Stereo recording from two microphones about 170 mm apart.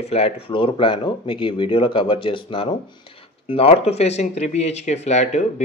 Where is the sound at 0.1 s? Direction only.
35° left (ahead or behind).